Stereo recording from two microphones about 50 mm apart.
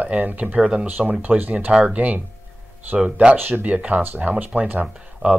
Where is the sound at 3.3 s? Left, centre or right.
Right.